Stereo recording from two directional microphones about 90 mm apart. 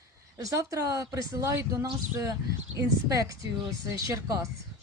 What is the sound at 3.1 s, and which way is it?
Speech, 40° right (ahead or behind).